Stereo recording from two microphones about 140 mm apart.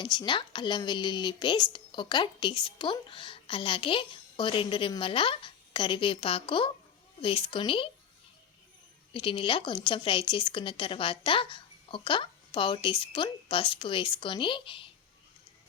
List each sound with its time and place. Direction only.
0.0 s speech: 35° left (ahead or behind)
9.1 s speech: 35° left (ahead or behind)